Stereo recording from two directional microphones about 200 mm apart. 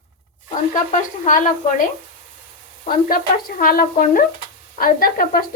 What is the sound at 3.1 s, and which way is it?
A woman's voice, 45° left (ahead or behind).